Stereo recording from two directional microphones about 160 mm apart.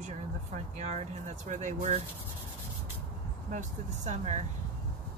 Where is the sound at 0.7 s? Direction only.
45° right (ahead or behind).